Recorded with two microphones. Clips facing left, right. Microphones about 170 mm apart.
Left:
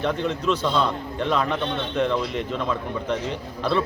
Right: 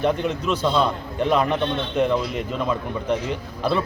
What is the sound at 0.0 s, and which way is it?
A man's voice, 10° right (ahead or behind).